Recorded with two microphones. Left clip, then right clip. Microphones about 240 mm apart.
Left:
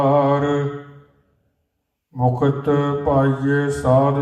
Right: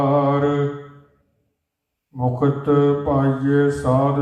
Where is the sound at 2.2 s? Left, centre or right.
Left.